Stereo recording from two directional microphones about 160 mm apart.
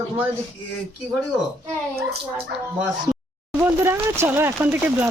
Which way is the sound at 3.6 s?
15° right (ahead or behind).